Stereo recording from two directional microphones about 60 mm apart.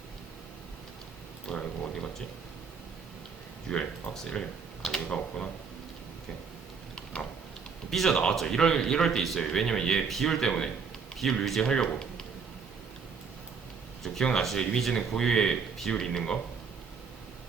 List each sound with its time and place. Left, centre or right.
1.5 s speech: centre
3.7 s speech: centre
5.0 s speech: left
6.9 s a sound: left
7.9 s speech: centre
14.0 s speech: centre